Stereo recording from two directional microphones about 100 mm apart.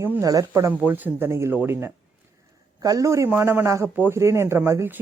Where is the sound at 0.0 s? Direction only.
30° right (ahead or behind).